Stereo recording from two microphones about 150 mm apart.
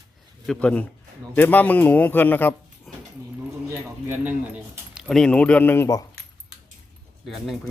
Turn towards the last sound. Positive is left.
turn(degrees=0)  # may be behind; listen again after turning